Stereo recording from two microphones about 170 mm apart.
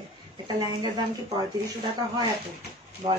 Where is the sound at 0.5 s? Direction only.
25° right (ahead or behind).